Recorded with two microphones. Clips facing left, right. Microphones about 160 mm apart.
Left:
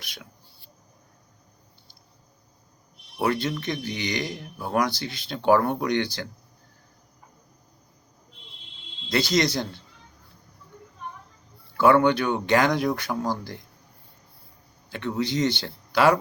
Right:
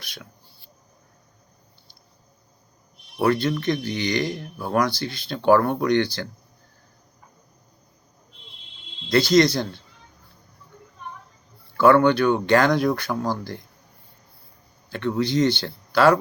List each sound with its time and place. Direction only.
0.0 s speech: 15° left (ahead or behind)
3.2 s speech: 20° left (ahead or behind)
9.0 s speech: 20° left (ahead or behind)
11.8 s speech: 15° left (ahead or behind)
14.8 s speech: 15° left (ahead or behind)